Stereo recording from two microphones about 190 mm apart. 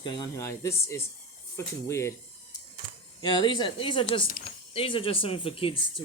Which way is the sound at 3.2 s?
25° left (ahead or behind).